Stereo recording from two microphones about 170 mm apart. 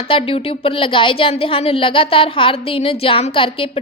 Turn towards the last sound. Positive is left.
turn(degrees=30)  # may be behind; listen again after turning